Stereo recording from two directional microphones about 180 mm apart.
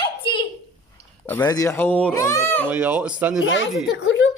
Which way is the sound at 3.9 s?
85° left.